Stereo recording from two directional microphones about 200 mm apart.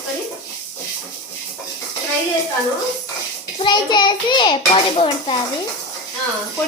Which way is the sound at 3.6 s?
20° left (ahead or behind).